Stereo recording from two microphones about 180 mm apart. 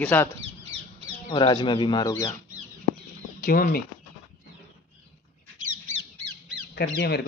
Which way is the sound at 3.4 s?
50° left (ahead or behind).